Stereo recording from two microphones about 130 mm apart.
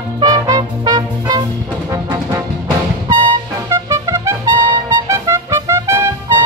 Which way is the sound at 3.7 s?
25° right (ahead or behind).